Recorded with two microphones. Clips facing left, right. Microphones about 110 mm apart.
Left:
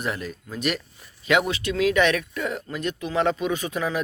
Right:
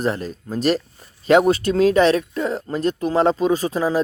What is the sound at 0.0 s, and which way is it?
Speech, 35° right (ahead or behind).